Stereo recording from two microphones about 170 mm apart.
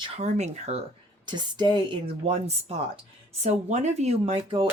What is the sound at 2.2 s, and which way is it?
Speech, 35° right (ahead or behind).